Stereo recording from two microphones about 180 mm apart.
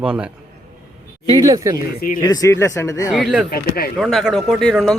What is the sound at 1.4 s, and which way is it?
Speech, 20° right (ahead or behind).